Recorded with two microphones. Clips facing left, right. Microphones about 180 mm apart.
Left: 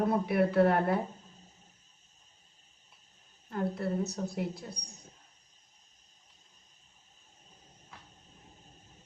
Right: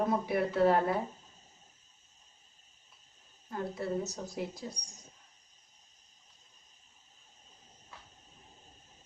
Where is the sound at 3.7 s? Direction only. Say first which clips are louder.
Left 2 dB; 60° left (ahead or behind).